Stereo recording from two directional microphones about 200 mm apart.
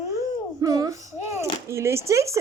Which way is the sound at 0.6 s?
15° right (ahead or behind).